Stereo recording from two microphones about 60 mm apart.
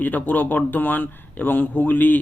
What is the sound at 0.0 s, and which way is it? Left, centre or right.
Speech, left.